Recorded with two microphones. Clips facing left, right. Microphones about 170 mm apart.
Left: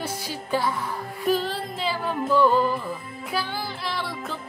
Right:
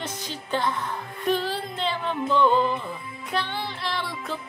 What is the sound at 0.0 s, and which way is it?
Music, 10° left (ahead or behind).